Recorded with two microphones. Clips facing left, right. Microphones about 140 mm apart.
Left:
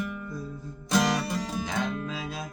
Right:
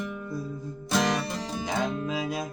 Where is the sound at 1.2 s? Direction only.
25° right (ahead or behind).